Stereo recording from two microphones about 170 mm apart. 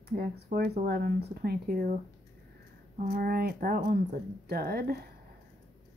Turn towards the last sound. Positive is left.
turn(degrees=-65)  # may be behind; listen again after turning